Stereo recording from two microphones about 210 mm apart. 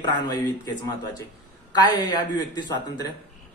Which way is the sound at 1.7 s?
20° left (ahead or behind).